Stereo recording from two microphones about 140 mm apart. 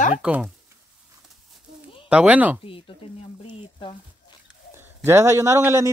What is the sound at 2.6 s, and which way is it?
Speech, 40° left (ahead or behind).